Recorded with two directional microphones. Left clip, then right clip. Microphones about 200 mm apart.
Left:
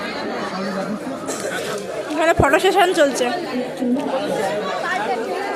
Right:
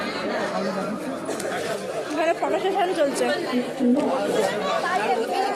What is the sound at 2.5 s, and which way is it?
Speech, 25° left (ahead or behind).